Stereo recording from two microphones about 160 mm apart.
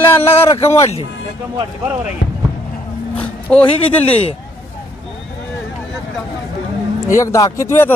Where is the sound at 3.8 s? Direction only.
35° left (ahead or behind).